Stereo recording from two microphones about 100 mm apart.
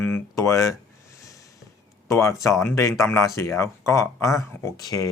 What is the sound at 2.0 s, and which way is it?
Speech, 30° left (ahead or behind).